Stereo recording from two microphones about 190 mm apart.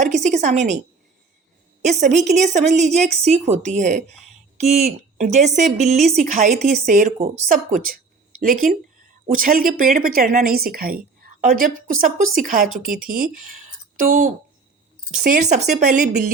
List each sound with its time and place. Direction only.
0.0 s a woman's voice: 40° right (ahead or behind)
1.8 s a woman's voice: 40° right (ahead or behind)
15.4 s a woman's voice: 35° right (ahead or behind)